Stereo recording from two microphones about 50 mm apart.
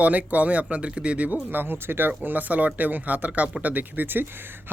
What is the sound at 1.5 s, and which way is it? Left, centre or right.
Speech, right.